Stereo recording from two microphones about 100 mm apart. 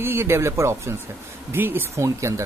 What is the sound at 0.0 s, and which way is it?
Speech, 25° right (ahead or behind).